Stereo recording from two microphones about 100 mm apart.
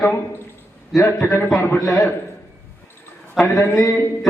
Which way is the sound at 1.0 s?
30° left (ahead or behind).